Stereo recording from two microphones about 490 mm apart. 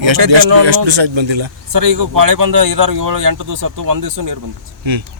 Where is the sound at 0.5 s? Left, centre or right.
Right.